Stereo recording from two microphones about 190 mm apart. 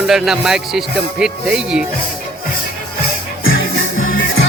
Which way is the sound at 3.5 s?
90° left.